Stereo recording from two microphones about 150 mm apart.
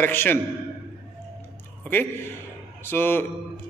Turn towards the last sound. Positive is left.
turn(degrees=15)  # may be behind; listen again after turning